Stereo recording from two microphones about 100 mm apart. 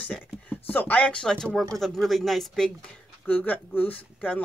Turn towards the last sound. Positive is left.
turn(degrees=15)  # may be behind; listen again after turning